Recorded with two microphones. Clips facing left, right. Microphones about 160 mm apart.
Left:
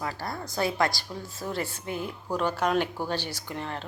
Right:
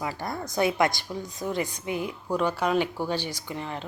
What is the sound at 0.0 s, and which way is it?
A woman's voice, 20° right (ahead or behind).